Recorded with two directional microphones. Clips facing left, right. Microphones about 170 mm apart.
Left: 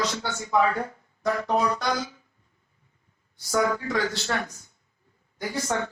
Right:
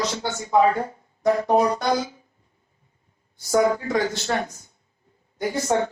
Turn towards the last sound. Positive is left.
turn(degrees=-25)  # may be behind; listen again after turning